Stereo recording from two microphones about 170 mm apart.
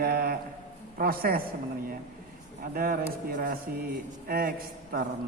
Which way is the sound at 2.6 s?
60° right (ahead or behind).